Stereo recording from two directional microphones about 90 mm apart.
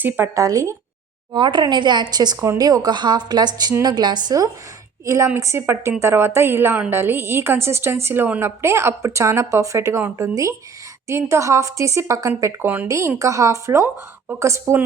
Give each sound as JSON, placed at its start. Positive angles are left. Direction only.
{"t": 0.3, "sound": "a woman's voice", "side_deg": -35}
{"t": 1.3, "sound": "a woman's voice", "side_deg": -60}
{"t": 5.0, "sound": "a woman's voice", "side_deg": -35}